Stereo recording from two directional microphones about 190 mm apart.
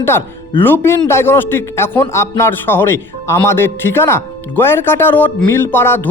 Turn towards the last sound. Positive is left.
turn(degrees=10)  # may be behind; listen again after turning